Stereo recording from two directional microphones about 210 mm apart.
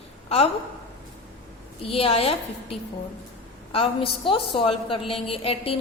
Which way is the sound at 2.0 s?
25° left (ahead or behind).